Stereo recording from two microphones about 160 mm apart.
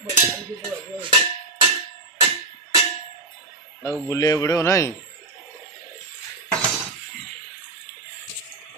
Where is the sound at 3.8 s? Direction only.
20° left (ahead or behind).